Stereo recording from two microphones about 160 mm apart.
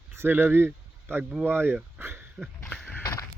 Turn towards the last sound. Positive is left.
turn(degrees=20)  # may be behind; listen again after turning